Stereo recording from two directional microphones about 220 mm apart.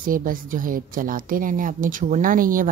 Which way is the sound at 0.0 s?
40° right (ahead or behind).